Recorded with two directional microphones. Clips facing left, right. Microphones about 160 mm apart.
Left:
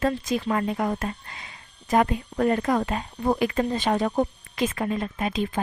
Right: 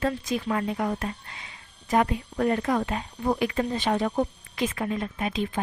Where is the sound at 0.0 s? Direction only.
45° left (ahead or behind).